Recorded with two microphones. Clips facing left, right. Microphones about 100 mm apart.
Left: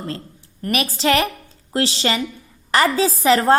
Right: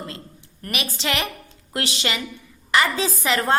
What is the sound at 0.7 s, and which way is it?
A woman's voice, 40° left (ahead or behind).